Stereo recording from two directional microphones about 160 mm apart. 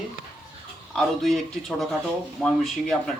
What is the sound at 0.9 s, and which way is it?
A man's voice, centre (ahead or behind).